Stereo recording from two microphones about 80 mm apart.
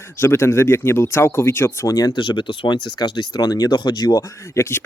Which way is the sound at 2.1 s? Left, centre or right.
Left.